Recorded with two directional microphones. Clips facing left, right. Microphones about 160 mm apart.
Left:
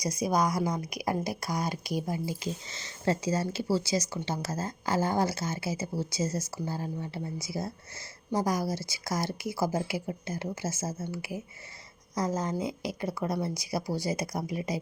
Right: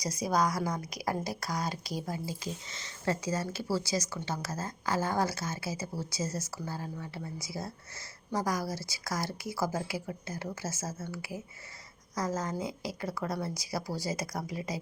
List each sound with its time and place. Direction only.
0.0 s a woman's voice: 30° right (ahead or behind)
0.3 s a woman's voice: 20° left (ahead or behind)
2.4 s speech: 30° left (ahead or behind)